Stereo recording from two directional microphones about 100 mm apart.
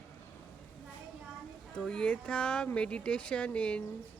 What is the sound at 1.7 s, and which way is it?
Speech, 10° left (ahead or behind).